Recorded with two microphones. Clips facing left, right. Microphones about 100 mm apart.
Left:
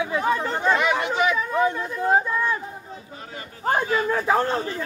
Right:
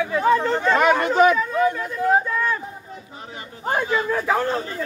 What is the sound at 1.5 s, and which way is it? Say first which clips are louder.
Speech: right 1 dB; 20° left (ahead or behind).